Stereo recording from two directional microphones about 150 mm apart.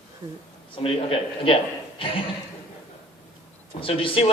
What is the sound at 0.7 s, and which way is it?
Speech, 35° left (ahead or behind).